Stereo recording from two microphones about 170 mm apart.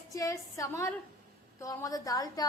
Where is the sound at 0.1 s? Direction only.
20° left (ahead or behind).